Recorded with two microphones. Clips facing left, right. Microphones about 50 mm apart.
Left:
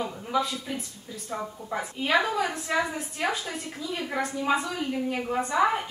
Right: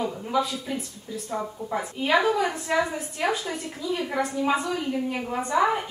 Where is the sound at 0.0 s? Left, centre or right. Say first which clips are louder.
Right 2 dB; centre.